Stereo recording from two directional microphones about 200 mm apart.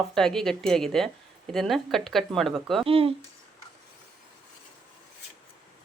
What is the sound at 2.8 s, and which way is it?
Speech, 30° right (ahead or behind).